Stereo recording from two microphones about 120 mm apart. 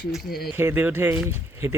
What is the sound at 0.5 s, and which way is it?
Speech, 20° right (ahead or behind).